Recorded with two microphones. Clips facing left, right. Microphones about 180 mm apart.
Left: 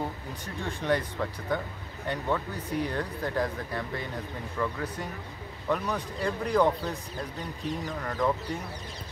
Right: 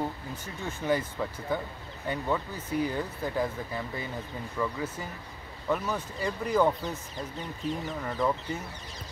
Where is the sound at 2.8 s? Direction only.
5° right (ahead or behind).